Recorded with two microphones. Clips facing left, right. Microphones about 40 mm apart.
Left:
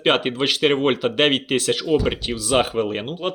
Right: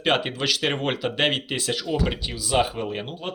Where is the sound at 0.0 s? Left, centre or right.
Left.